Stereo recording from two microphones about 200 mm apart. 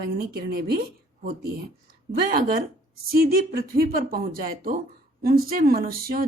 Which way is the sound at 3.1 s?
50° right (ahead or behind).